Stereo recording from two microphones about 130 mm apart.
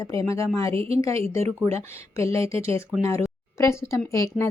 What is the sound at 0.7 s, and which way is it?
Speech, 45° right (ahead or behind).